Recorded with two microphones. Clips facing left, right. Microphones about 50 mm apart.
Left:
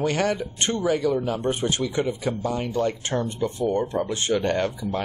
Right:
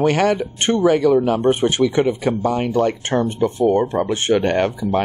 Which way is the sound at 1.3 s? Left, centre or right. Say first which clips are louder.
Right 8 dB; right.